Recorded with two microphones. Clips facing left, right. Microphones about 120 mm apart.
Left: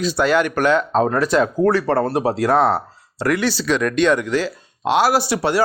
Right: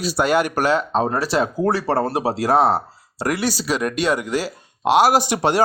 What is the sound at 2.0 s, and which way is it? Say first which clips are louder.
A man's voice: left 2 dB; 10° right (ahead or behind).